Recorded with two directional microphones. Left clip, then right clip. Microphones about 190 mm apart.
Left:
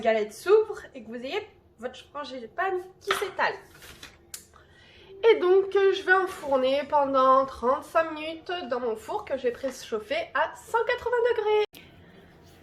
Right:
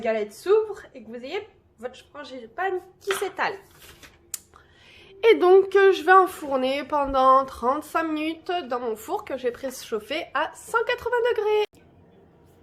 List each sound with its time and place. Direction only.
0.0 s speech: 35° right (ahead or behind)
4.3 s a sound: 60° right (ahead or behind)
5.0 s a woman's voice: 55° right (ahead or behind)